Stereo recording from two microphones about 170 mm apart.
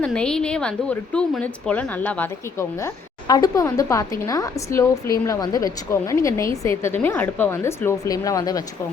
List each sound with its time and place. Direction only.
0.0 s a woman's voice: 5° left (ahead or behind); by 8.6 s 20° left (ahead or behind)